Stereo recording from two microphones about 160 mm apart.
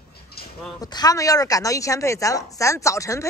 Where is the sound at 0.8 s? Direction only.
25° left (ahead or behind).